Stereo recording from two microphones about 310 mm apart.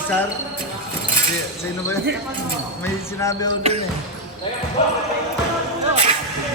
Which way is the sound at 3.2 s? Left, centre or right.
Centre.